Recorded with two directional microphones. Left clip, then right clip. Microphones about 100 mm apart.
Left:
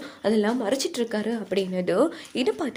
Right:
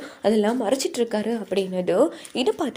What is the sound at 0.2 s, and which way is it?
A woman's voice, 20° right (ahead or behind).